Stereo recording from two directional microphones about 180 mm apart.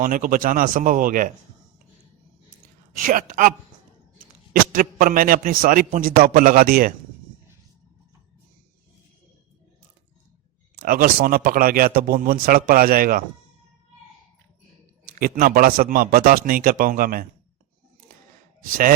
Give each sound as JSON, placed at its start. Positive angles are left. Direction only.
{"t": 0.0, "sound": "a man's voice", "side_deg": -50}
{"t": 3.0, "sound": "a man's voice", "side_deg": -50}
{"t": 4.7, "sound": "a man's voice", "side_deg": -50}
{"t": 10.8, "sound": "a man's voice", "side_deg": -55}
{"t": 15.2, "sound": "a man's voice", "side_deg": -50}